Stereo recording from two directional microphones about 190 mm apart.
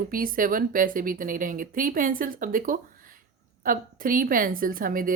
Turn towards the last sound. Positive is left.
turn(degrees=-45)  # may be behind; listen again after turning